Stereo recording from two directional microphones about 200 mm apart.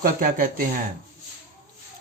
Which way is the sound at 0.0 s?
45° right (ahead or behind).